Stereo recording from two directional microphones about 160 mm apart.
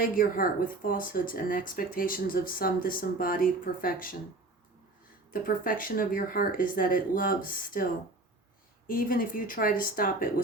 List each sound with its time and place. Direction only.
0.0 s speech: 65° left (ahead or behind)
5.3 s speech: 60° left (ahead or behind)
8.9 s speech: 60° left (ahead or behind)